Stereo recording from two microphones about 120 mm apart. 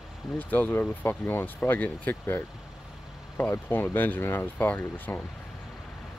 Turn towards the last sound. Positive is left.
turn(degrees=15)  # may be behind; listen again after turning